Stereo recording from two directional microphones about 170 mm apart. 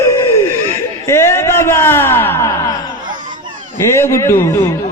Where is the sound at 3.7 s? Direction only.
15° left (ahead or behind).